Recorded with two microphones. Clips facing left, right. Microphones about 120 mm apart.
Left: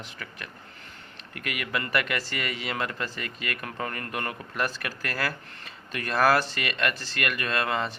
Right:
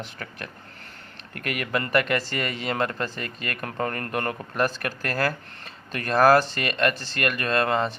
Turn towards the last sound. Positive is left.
turn(degrees=-40)  # may be behind; listen again after turning